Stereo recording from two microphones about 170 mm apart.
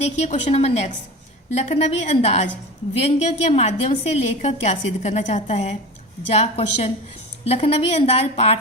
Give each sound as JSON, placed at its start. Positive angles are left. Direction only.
{"t": 0.0, "sound": "a woman's voice", "side_deg": 40}